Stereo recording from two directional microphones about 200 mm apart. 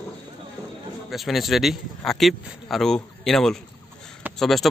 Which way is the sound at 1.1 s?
Centre (ahead or behind).